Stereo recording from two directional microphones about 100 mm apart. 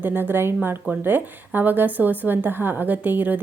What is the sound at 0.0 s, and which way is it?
Speech, 20° right (ahead or behind).